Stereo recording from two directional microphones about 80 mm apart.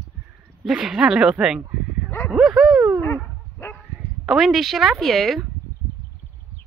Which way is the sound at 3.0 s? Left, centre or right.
Left.